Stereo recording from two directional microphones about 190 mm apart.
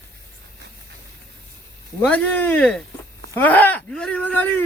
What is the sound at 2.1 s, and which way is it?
Speech, 10° left (ahead or behind).